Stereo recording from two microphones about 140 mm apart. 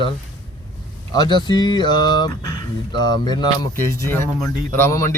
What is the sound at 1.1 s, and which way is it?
Speech, 30° left (ahead or behind).